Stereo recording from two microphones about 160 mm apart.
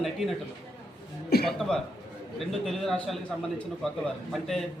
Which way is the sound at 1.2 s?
75° left (ahead or behind).